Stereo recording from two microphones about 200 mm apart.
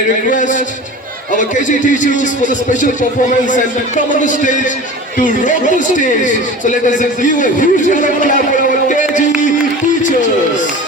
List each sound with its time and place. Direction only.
0.3 s a sound: 40° left (ahead or behind)
1.4 s speech: 40° left (ahead or behind)
8.9 s music: 40° left (ahead or behind)